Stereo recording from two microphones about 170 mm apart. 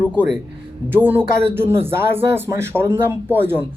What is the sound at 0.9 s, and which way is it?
Speech, 10° right (ahead or behind).